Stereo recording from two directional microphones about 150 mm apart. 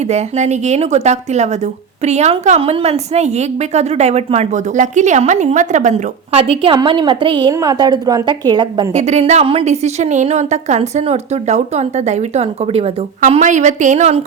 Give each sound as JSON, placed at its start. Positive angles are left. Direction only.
{"t": 0.1, "sound": "a woman's voice", "side_deg": -50}
{"t": 6.3, "sound": "a woman's voice", "side_deg": -40}
{"t": 8.9, "sound": "a woman's voice", "side_deg": -50}